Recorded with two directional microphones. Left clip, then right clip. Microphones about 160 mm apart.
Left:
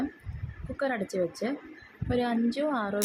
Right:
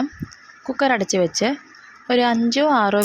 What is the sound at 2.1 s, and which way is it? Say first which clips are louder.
Speech: right 11 dB; 35° right (ahead or behind).